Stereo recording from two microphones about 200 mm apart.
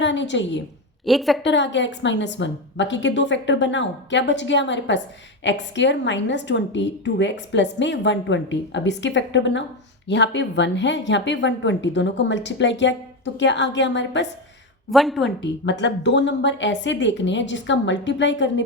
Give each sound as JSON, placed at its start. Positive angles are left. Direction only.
{"t": 0.0, "sound": "a woman's voice", "side_deg": 65}
{"t": 1.0, "sound": "a woman's voice", "side_deg": 0}
{"t": 1.4, "sound": "a woman's voice", "side_deg": 65}
{"t": 14.8, "sound": "a woman's voice", "side_deg": 0}
{"t": 15.4, "sound": "a woman's voice", "side_deg": 60}